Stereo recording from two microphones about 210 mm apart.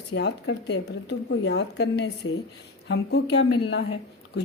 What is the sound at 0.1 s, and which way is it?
A woman's voice, 55° left (ahead or behind).